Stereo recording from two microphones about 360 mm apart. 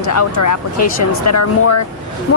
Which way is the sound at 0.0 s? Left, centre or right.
Left.